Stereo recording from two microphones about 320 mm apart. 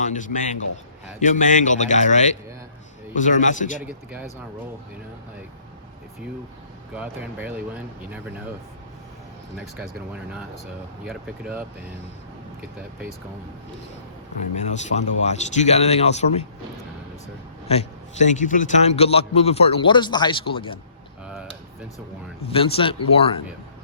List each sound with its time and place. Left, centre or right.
0.0 s a man's voice: left
3.8 s speech: centre
6.9 s speech: centre
11.0 s speech: centre
14.5 s a man's voice: left
17.7 s a man's voice: left
22.4 s speech: centre